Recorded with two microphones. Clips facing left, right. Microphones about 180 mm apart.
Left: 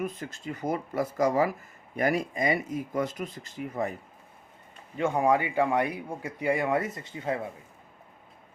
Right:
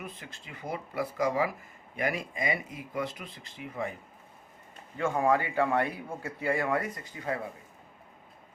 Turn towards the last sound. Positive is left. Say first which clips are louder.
# left 3 dB
turn(degrees=25)  # may be behind; listen again after turning